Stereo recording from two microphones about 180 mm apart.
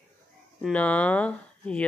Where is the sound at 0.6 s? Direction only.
5° left (ahead or behind).